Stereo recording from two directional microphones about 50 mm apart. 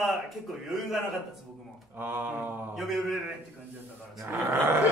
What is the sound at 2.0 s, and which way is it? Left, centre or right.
Speech, right.